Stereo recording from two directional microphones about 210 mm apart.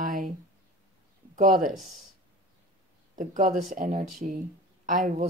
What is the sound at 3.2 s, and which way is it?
A woman's voice, 35° right (ahead or behind).